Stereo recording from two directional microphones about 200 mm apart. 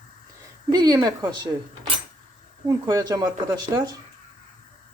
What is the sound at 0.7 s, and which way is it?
Speech, 20° right (ahead or behind).